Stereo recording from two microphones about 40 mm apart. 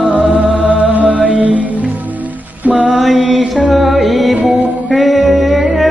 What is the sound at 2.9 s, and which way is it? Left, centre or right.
Mantra, centre.